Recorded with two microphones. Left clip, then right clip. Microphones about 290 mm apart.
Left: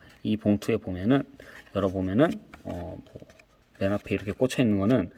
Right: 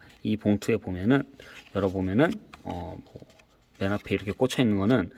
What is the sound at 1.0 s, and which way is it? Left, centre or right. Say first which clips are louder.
Speech: right 1 dB; centre.